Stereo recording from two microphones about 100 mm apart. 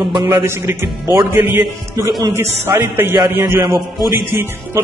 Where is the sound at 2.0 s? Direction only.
40° right (ahead or behind).